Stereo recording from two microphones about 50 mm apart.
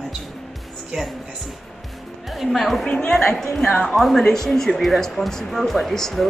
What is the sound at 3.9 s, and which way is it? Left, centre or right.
Speech, centre.